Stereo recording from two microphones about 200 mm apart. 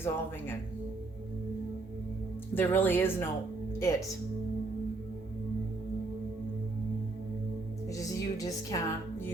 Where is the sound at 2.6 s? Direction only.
10° left (ahead or behind).